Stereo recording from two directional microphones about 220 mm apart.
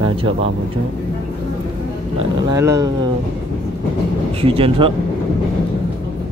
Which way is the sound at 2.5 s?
15° right (ahead or behind).